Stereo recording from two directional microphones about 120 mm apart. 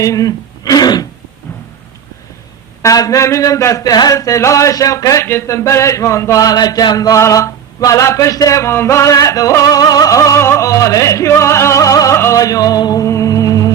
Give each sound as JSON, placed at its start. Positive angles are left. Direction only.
{"t": 0.0, "sound": "speech", "side_deg": 30}
{"t": 2.8, "sound": "mantra", "side_deg": 30}